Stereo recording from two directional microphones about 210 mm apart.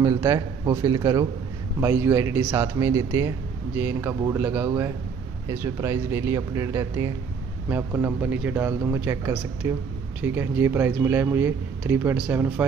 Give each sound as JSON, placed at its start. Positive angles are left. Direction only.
{"t": 0.0, "sound": "speech", "side_deg": -15}